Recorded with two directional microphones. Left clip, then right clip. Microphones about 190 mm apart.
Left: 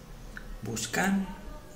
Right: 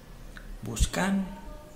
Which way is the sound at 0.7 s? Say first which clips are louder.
Left 1 dB; 15° right (ahead or behind).